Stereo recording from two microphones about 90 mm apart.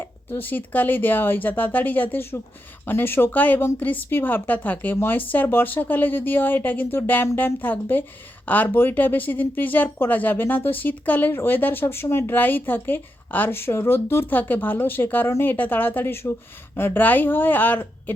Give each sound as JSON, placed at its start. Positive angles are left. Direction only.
{"t": 0.0, "sound": "speech", "side_deg": 25}